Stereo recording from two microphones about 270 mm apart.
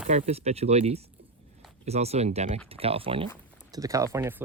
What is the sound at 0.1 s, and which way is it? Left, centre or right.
Speech, right.